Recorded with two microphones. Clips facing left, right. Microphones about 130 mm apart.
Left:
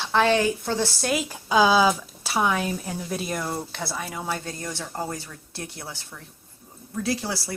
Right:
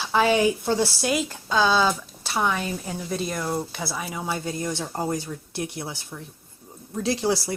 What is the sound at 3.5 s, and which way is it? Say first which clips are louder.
Speech: right 2 dB; 5° right (ahead or behind).